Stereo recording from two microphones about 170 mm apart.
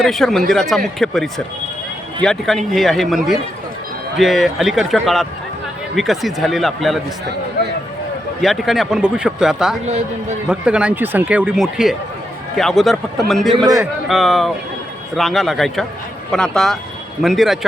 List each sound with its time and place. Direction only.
0.0 s speech: centre (ahead or behind)
8.4 s speech: centre (ahead or behind)
9.8 s speech: 40° right (ahead or behind)
10.5 s speech: 5° right (ahead or behind)